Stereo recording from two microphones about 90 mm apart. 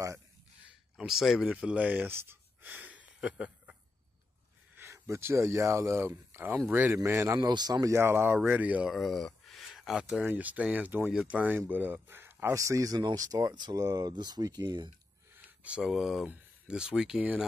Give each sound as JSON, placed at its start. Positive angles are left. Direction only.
{"t": 0.9, "sound": "speech", "side_deg": -5}
{"t": 4.7, "sound": "speech", "side_deg": -30}
{"t": 7.0, "sound": "speech", "side_deg": -35}
{"t": 7.3, "sound": "speech", "side_deg": -50}
{"t": 7.9, "sound": "speech", "side_deg": -25}
{"t": 8.8, "sound": "speech", "side_deg": 0}
{"t": 12.5, "sound": "speech", "side_deg": -35}
{"t": 15.3, "sound": "a sound", "side_deg": -15}
{"t": 15.8, "sound": "speech", "side_deg": -5}